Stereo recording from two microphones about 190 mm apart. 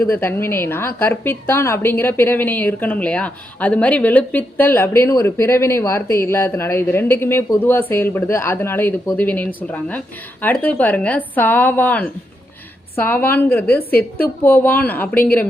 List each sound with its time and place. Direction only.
0.0 s a woman's voice: 10° left (ahead or behind)